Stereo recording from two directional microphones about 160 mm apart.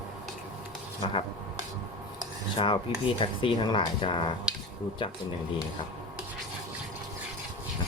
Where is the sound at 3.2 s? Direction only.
30° left (ahead or behind).